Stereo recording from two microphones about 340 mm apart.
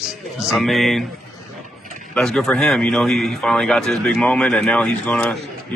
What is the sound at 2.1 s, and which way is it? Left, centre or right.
Speech, centre.